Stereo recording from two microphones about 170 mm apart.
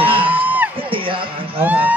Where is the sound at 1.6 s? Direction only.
10° right (ahead or behind).